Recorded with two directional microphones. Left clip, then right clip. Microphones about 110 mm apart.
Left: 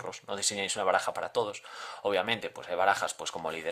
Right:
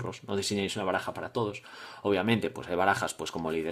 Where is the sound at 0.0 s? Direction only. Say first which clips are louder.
Right 1 dB; 25° left (ahead or behind).